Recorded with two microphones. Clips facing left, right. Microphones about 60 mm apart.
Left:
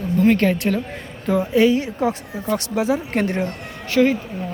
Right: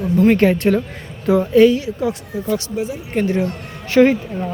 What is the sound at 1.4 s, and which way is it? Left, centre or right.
Speech, centre.